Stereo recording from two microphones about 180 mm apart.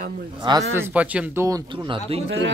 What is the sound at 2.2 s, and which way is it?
Speech, 90° right.